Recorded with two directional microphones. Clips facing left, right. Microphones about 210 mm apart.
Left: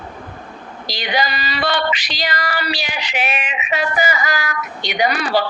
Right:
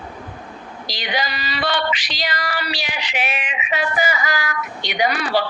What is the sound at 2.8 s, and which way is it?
Speech, 40° left (ahead or behind).